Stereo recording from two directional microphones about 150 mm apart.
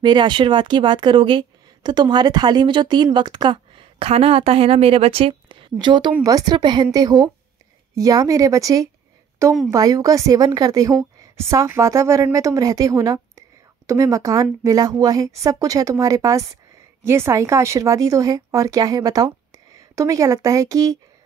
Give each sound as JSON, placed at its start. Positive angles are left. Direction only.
{"t": 0.0, "sound": "a woman's voice", "side_deg": -30}